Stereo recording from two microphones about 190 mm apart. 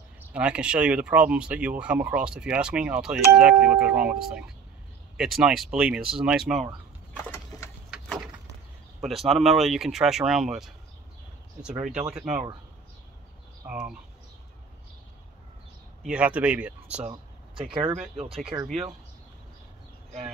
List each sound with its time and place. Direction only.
0.2 s speech: 5° right (ahead or behind)
7.2 s wood: 15° left (ahead or behind)
9.0 s speech: centre (ahead or behind)
16.0 s speech: 5° right (ahead or behind)
17.1 s speech: 25° right (ahead or behind)